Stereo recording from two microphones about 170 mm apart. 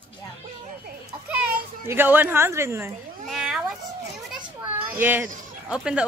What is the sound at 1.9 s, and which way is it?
A woman's voice, 10° right (ahead or behind).